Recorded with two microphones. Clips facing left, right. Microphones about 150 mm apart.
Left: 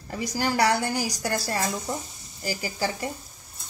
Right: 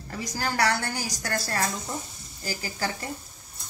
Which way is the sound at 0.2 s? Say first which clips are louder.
Left 3 dB; 10° left (ahead or behind).